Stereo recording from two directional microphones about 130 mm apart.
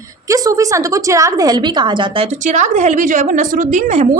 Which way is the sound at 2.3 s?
70° right (ahead or behind).